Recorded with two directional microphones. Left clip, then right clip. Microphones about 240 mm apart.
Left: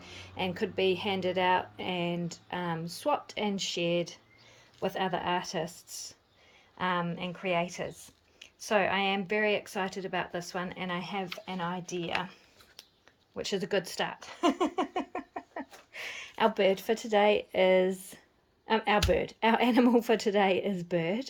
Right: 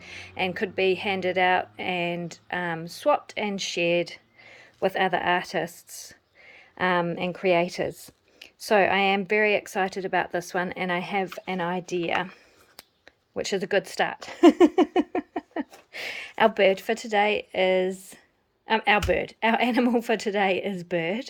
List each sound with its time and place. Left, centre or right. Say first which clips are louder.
0.0 s a woman's voice: right 6 dB; centre
6.7 s a woman's voice: right 7 dB; centre
14.3 s a woman's voice: right 13 dB; right; by 21.2 s centre